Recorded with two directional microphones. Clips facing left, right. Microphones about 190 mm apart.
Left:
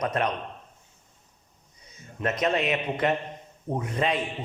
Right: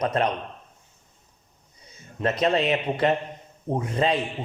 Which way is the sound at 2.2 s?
30° right (ahead or behind).